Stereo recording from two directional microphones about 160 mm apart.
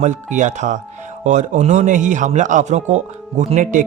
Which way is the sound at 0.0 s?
50° right (ahead or behind).